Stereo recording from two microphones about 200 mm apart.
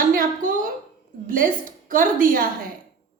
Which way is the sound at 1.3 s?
45° right (ahead or behind).